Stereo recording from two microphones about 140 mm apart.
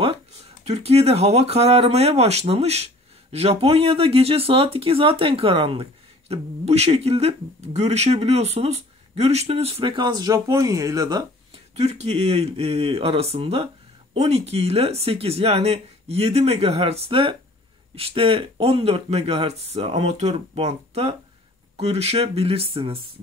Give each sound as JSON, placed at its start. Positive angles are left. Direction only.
{"t": 0.7, "sound": "speech", "side_deg": -50}
{"t": 11.7, "sound": "speech", "side_deg": -50}